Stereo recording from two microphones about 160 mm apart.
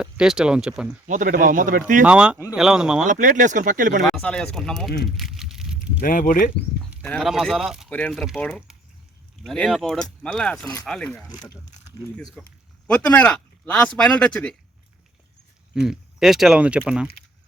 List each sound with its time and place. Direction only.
0.0 s speech: 5° right (ahead or behind)
1.0 s speech: 55° right (ahead or behind)
2.0 s speech: 5° right (ahead or behind)
3.0 s speech: 50° right (ahead or behind)
4.0 s speech: 5° left (ahead or behind)
5.0 s a sound: centre (ahead or behind)
6.0 s speech: 60° left (ahead or behind)
7.0 s speech: 5° left (ahead or behind)
11.3 s speech: 25° left (ahead or behind)
12.1 s speech: 5° left (ahead or behind)
15.7 s speech: 5° right (ahead or behind)